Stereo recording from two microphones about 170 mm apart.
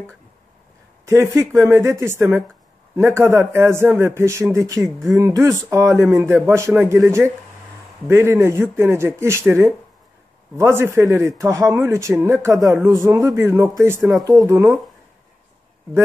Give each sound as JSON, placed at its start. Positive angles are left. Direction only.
{"t": 1.0, "sound": "speech", "side_deg": -15}